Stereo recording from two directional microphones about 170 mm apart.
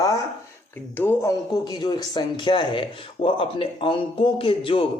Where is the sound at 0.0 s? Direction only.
20° left (ahead or behind).